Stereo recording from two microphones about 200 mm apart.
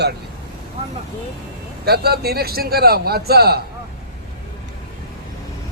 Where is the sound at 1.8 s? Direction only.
50° right (ahead or behind).